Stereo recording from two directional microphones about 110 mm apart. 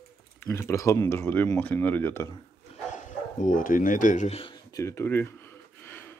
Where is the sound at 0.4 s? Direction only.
25° left (ahead or behind).